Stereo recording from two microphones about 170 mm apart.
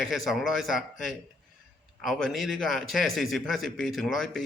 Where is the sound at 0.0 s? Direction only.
Centre (ahead or behind).